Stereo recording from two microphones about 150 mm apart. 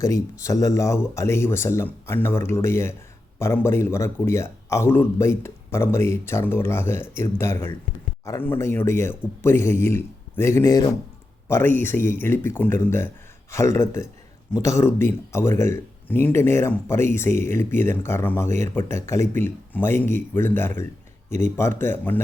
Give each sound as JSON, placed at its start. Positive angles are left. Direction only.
{"t": 0.0, "sound": "speech", "side_deg": 20}
{"t": 11.4, "sound": "speech", "side_deg": 15}